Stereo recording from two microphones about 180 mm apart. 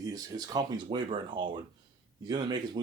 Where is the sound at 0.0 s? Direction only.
20° right (ahead or behind).